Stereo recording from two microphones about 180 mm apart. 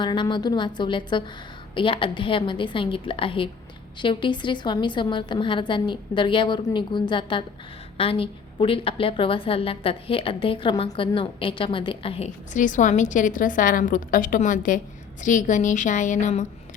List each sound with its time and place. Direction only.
0.0 s a woman's voice: 25° left (ahead or behind)
12.5 s a woman's voice: 45° left (ahead or behind)